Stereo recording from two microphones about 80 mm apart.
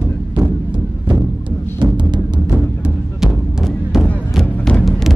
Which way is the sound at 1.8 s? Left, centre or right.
Right.